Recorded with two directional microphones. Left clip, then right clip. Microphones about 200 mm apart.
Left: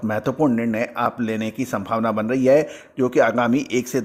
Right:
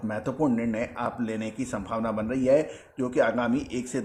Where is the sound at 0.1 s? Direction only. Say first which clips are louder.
Left 7 dB; 30° left (ahead or behind).